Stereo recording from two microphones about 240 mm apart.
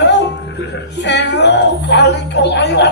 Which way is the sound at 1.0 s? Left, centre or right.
Left.